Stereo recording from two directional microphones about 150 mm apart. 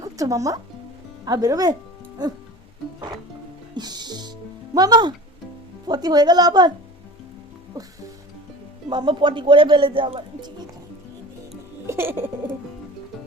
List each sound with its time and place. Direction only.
0.0 s speech: 20° right (ahead or behind)
3.8 s speech: 30° right (ahead or behind)
8.9 s speech: 30° right (ahead or behind)
11.9 s a sound: 15° right (ahead or behind)